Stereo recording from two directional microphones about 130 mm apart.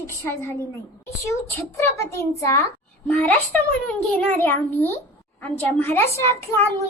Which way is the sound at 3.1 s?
10° left (ahead or behind).